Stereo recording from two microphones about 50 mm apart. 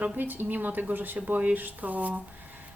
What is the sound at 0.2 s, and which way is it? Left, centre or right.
Speech, right.